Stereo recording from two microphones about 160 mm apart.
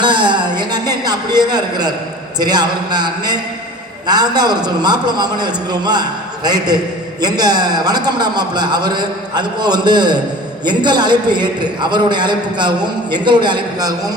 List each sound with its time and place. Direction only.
0.0 s a man's voice: 30° right (ahead or behind)